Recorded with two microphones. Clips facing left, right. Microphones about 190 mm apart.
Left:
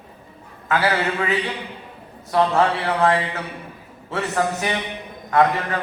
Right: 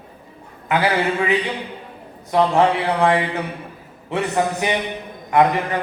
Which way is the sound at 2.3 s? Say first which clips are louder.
Right 2 dB; 15° right (ahead or behind).